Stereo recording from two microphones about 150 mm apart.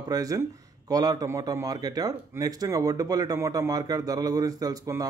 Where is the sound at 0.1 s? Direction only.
25° right (ahead or behind).